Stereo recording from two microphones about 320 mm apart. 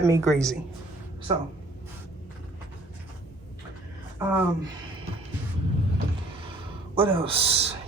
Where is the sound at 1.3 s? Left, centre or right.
Centre.